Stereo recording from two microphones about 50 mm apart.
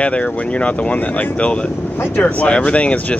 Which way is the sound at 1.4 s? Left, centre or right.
Left.